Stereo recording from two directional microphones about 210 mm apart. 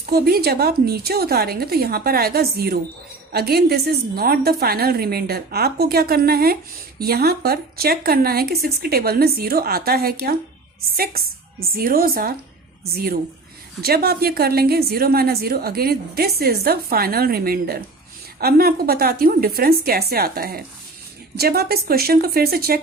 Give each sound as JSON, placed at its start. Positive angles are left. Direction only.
{"t": 0.1, "sound": "a woman's voice", "side_deg": -45}